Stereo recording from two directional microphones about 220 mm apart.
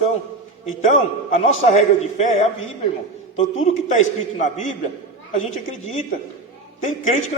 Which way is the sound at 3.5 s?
35° left (ahead or behind).